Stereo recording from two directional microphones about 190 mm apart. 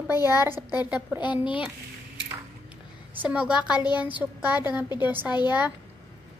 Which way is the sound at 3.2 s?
5° right (ahead or behind).